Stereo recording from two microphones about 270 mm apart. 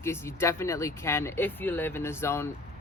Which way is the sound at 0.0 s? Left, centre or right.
Centre.